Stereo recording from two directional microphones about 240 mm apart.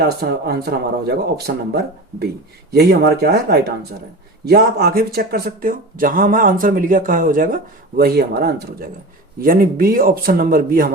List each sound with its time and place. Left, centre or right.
0.2 s speech: right